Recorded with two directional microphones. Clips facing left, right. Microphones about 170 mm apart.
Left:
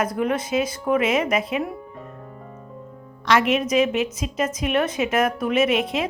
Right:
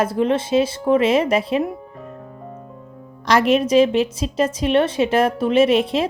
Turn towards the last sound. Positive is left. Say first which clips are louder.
# right 5 dB
turn(degrees=-30)  # may be behind; listen again after turning